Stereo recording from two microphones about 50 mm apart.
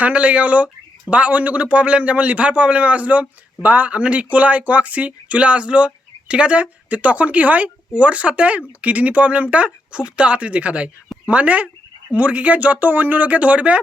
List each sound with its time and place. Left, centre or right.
0.0 s a man's voice: right